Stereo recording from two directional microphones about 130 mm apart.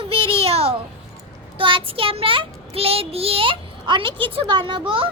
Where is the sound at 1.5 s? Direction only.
40° right (ahead or behind).